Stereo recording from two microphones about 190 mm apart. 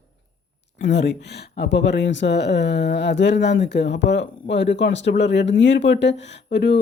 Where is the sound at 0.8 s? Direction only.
65° left (ahead or behind).